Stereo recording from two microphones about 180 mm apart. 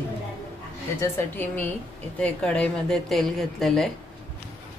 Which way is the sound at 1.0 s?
10° left (ahead or behind).